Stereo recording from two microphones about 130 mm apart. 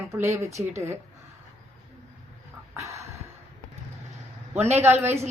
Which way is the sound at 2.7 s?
20° right (ahead or behind).